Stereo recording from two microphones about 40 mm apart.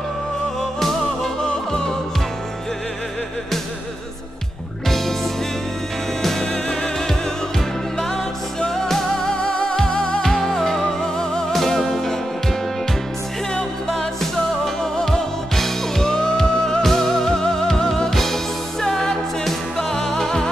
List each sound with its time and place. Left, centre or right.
0.7 s music: centre
1.4 s music: centre
4.8 s music: centre
6.2 s music: centre
8.5 s music: centre
9.4 s music: left
10.2 s music: centre
14.8 s music: centre
16.1 s music: left